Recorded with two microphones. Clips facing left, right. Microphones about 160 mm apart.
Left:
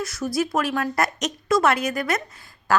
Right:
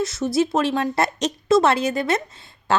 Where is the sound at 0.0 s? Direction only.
25° right (ahead or behind).